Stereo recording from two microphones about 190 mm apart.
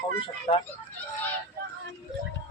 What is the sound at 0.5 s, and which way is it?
Speech, 30° left (ahead or behind).